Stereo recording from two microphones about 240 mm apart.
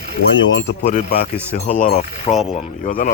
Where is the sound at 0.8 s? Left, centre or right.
Left.